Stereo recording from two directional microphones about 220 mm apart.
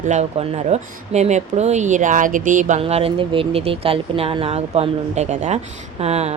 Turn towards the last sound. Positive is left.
turn(degrees=-30)  # may be behind; listen again after turning